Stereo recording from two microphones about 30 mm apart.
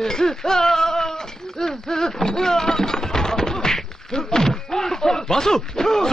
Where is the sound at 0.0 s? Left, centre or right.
Centre.